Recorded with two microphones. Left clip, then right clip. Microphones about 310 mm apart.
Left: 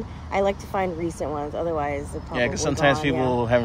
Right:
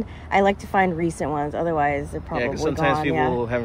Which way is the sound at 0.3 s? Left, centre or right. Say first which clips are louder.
Right 4 dB; right.